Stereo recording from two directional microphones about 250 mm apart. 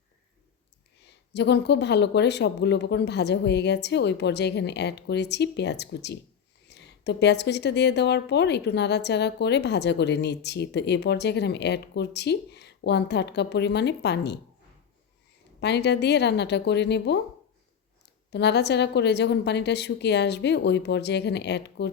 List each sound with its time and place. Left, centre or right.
1.0 s a woman's voice: left
15.6 s a woman's voice: left
18.3 s a woman's voice: left